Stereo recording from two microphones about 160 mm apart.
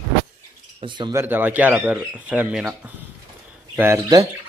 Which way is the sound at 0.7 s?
30° right (ahead or behind).